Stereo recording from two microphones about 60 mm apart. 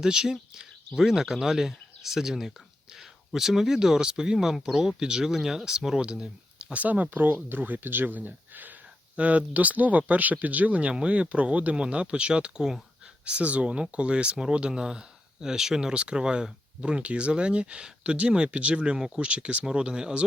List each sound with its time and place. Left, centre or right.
0.0 s speech: centre